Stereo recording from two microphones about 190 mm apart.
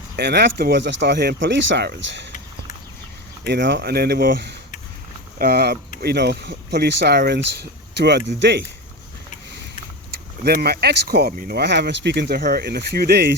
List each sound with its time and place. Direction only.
0.2 s speech: 60° right (ahead or behind)
3.4 s speech: 65° right (ahead or behind)
10.1 s speech: 55° right (ahead or behind)